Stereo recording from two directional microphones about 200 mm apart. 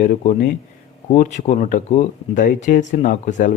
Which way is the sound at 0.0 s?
40° left (ahead or behind).